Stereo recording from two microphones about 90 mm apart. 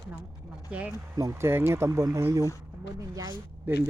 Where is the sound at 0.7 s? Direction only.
15° right (ahead or behind).